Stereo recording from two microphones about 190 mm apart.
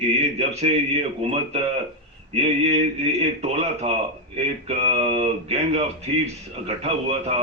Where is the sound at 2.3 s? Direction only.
35° right (ahead or behind).